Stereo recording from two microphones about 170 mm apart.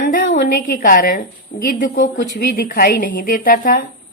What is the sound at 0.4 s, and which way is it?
A woman's voice, 55° left (ahead or behind).